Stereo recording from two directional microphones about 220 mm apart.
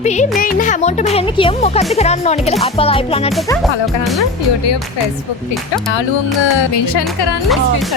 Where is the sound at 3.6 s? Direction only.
Centre (ahead or behind).